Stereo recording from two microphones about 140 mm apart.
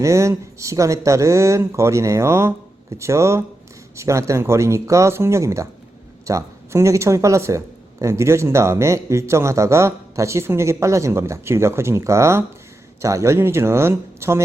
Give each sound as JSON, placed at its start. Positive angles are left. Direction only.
{"t": 0.0, "sound": "speech", "side_deg": -20}